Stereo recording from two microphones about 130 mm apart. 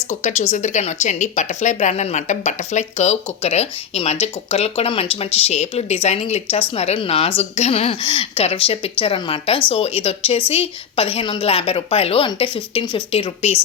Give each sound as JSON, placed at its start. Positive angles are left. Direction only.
{"t": 0.1, "sound": "speech", "side_deg": 60}